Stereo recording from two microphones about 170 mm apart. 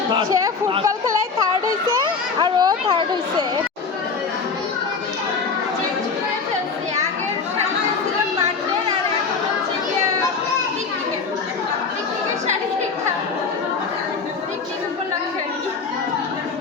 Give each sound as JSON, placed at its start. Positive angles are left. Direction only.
{"t": 0.1, "sound": "speech", "side_deg": -20}
{"t": 1.6, "sound": "children playing", "side_deg": -20}